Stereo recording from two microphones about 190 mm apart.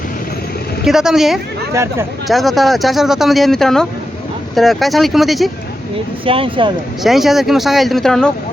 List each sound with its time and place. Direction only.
0.9 s speech: centre (ahead or behind)
1.7 s speech: 15° right (ahead or behind)
2.2 s speech: centre (ahead or behind)
6.2 s speech: 30° right (ahead or behind)
7.0 s speech: centre (ahead or behind)